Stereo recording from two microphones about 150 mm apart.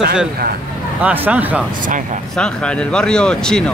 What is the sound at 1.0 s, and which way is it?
Speech, 10° right (ahead or behind).